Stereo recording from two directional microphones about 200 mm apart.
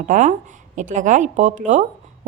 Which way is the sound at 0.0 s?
35° right (ahead or behind).